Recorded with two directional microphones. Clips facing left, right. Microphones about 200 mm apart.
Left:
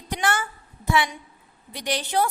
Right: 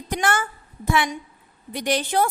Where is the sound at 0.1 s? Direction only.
50° right (ahead or behind).